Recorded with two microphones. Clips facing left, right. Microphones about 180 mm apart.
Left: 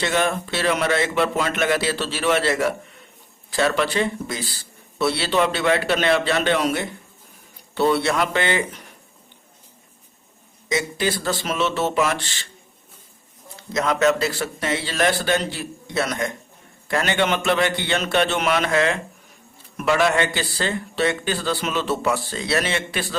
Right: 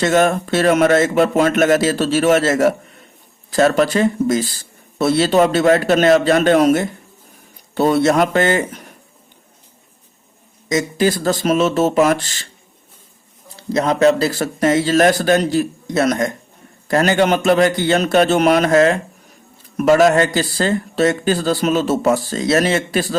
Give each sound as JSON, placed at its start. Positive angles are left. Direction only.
{"t": 0.0, "sound": "speech", "side_deg": -45}
{"t": 10.7, "sound": "speech", "side_deg": -45}
{"t": 13.6, "sound": "a man's voice", "side_deg": -35}